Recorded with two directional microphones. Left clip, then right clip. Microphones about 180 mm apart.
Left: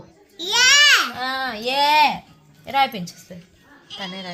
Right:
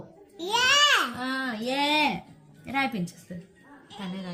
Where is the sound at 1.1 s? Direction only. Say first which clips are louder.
Left 6 dB; 15° left (ahead or behind).